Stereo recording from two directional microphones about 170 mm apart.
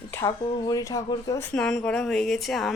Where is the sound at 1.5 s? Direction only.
5° left (ahead or behind).